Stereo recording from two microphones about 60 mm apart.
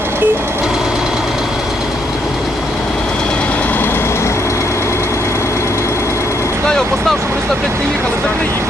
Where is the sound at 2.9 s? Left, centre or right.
Centre; by 6.5 s left.